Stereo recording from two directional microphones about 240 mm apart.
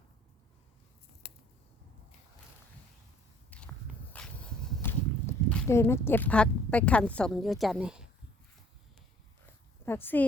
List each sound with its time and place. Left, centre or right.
3.5 s walk: centre
9.8 s speech: centre